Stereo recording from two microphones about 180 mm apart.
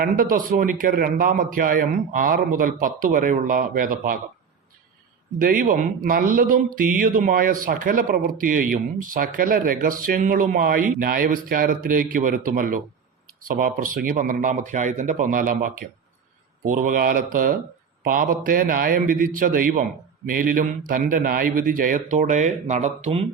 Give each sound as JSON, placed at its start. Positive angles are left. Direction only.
{"t": 0.0, "sound": "speech", "side_deg": -50}
{"t": 5.4, "sound": "speech", "side_deg": -50}